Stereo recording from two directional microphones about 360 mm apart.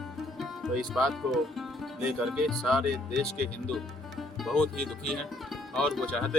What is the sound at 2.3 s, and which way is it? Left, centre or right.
Music, centre.